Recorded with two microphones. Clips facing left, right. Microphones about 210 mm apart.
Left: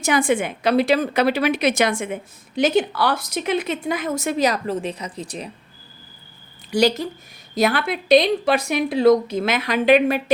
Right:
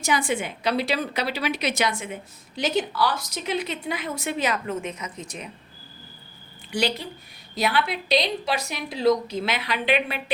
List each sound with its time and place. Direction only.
0.0 s a woman's voice: 55° left (ahead or behind); by 5.5 s 35° left (ahead or behind)
6.7 s a woman's voice: 40° left (ahead or behind)